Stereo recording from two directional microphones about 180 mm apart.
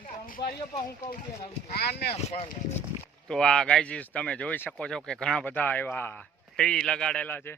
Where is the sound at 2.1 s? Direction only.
30° left (ahead or behind).